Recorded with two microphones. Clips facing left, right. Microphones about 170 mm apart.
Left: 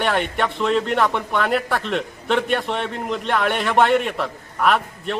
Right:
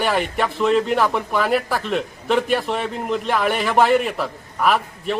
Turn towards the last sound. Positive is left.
turn(degrees=0)  # may be behind; listen again after turning